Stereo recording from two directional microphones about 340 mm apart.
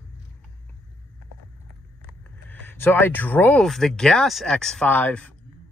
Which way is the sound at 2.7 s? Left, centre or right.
Centre.